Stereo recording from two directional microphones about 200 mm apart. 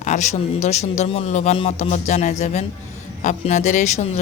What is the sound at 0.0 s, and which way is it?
Speech, 35° left (ahead or behind).